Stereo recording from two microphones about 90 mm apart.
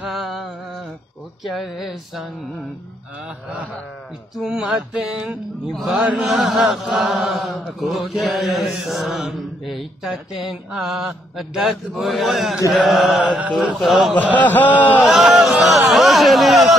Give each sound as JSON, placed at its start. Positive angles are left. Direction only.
{"t": 0.0, "sound": "a sound", "side_deg": 0}
{"t": 1.4, "sound": "chant", "side_deg": 0}
{"t": 4.4, "sound": "a sound", "side_deg": -5}
{"t": 5.8, "sound": "chant", "side_deg": 0}
{"t": 14.3, "sound": "a man's voice", "side_deg": 20}
{"t": 15.0, "sound": "chant", "side_deg": 0}